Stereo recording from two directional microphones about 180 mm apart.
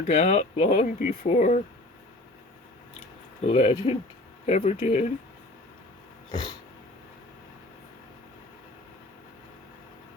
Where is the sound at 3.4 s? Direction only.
35° left (ahead or behind).